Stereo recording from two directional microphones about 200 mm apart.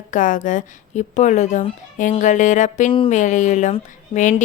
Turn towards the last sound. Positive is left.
turn(degrees=30)  # may be behind; listen again after turning